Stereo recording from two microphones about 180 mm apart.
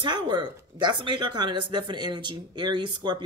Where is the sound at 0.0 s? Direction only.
25° right (ahead or behind).